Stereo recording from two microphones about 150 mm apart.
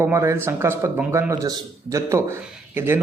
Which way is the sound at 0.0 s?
20° right (ahead or behind).